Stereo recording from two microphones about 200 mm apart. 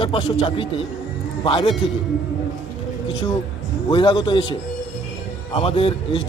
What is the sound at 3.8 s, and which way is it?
Speech, 20° left (ahead or behind).